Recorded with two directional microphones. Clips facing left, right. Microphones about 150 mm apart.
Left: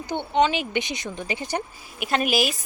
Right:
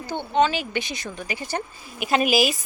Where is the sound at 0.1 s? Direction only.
20° left (ahead or behind).